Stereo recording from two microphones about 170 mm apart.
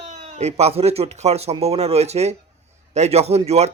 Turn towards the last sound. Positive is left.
turn(degrees=-40)  # may be behind; listen again after turning